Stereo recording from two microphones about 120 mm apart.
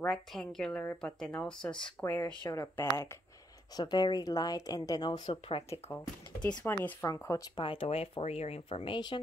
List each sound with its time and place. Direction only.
0.0 s a woman's voice: 5° left (ahead or behind)
2.5 s speech: 25° left (ahead or behind)
3.7 s a woman's voice: 35° left (ahead or behind)
5.3 s speech: 50° left (ahead or behind)
5.9 s speech: 20° left (ahead or behind)
7.1 s speech: 25° left (ahead or behind)
7.5 s speech: 45° left (ahead or behind)